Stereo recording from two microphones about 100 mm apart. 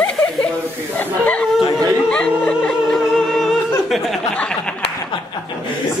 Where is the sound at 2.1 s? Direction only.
10° left (ahead or behind).